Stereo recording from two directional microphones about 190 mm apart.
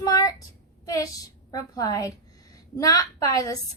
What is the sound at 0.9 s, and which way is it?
A woman's voice, 20° left (ahead or behind).